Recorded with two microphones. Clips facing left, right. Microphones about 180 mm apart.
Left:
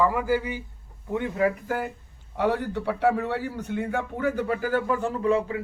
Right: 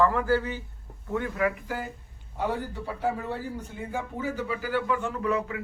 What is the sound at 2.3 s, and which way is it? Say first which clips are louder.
A man's voice: left 5 dB; 70° left (ahead or behind).